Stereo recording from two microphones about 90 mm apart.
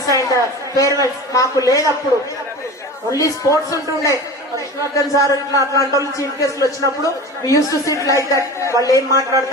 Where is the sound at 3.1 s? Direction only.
40° left (ahead or behind).